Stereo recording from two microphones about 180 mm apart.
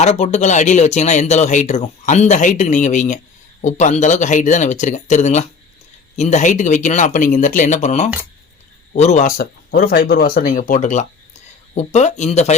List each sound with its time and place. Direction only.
0.0 s speech: 40° left (ahead or behind)
9.4 s speech: 60° left (ahead or behind); by 12.5 s 40° left (ahead or behind)